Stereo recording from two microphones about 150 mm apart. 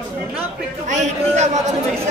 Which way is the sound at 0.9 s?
50° right (ahead or behind).